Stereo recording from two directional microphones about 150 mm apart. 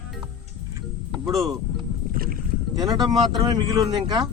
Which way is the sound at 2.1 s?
75° right (ahead or behind).